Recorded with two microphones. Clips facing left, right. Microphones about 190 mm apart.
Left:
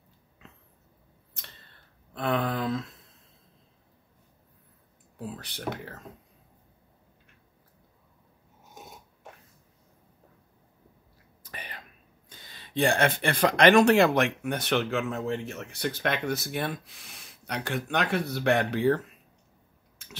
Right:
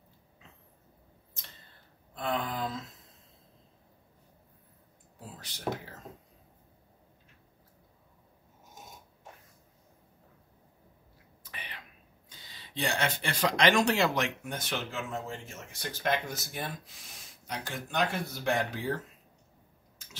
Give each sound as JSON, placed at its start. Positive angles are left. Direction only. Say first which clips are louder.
{"t": 2.1, "sound": "a sound", "louder": "left 5 dB", "side_deg": 70}
{"t": 5.3, "sound": "speech", "louder": "right 1 dB", "side_deg": 60}
{"t": 11.5, "sound": "throat clearing", "louder": "left 4 dB", "side_deg": 45}
{"t": 12.3, "sound": "speech", "louder": "left 3 dB", "side_deg": 50}